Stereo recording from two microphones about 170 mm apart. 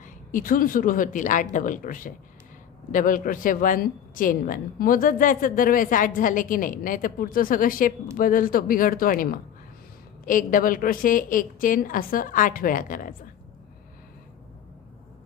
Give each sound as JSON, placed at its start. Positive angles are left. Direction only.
{"t": 0.0, "sound": "a woman's voice", "side_deg": 50}